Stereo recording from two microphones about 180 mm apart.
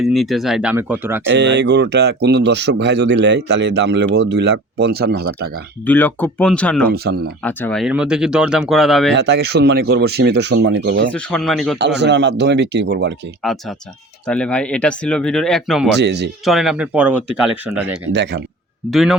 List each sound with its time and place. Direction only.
0.0 s speech: centre (ahead or behind)
1.2 s speech: 75° right (ahead or behind); by 5.3 s 60° right (ahead or behind)
5.8 s speech: 10° left (ahead or behind)
9.1 s speech: 65° right (ahead or behind)
11.1 s speech: 5° left (ahead or behind)
11.8 s speech: 70° right (ahead or behind)
13.4 s speech: centre (ahead or behind)
16.0 s speech: 70° right (ahead or behind)
16.5 s speech: centre (ahead or behind)
18.1 s speech: 75° right (ahead or behind)
18.9 s speech: centre (ahead or behind)